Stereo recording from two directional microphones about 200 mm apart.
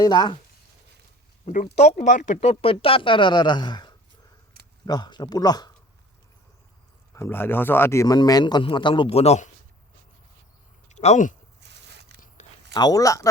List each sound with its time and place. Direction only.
0.0 s speech: 20° left (ahead or behind)
1.5 s speech: 35° left (ahead or behind); by 5.7 s 20° left (ahead or behind)
7.1 s speech: 10° left (ahead or behind); by 9.5 s 30° left (ahead or behind)
10.8 s speech: 35° left (ahead or behind)
11.6 s biting: 60° right (ahead or behind)
12.4 s a sound: 35° left (ahead or behind)
12.7 s speech: 20° left (ahead or behind)